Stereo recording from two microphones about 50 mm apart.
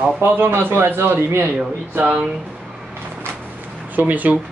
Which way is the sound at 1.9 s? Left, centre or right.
Right.